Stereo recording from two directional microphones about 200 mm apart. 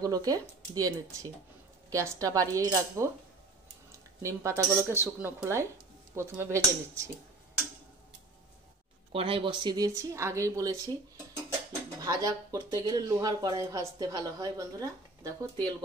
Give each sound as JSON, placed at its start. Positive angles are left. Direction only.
{"t": 0.0, "sound": "speech", "side_deg": -20}
{"t": 4.4, "sound": "speech", "side_deg": -15}
{"t": 9.1, "sound": "speech", "side_deg": -25}
{"t": 12.0, "sound": "speech", "side_deg": -20}